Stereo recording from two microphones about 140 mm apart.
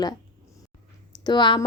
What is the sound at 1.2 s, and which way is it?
Speech, 35° left (ahead or behind).